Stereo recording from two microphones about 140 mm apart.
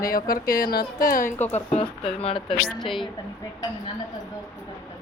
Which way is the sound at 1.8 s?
40° left (ahead or behind).